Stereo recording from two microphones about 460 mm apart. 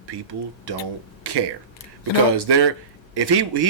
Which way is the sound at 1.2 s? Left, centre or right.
Right.